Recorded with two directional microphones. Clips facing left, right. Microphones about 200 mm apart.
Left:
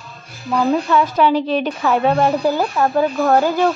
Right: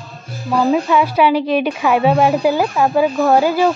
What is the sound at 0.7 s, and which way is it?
A woman's voice, 10° right (ahead or behind).